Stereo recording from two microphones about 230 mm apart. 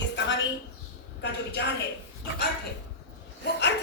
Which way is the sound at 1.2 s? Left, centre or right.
Left.